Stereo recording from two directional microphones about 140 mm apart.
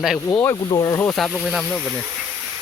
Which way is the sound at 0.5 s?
30° left (ahead or behind).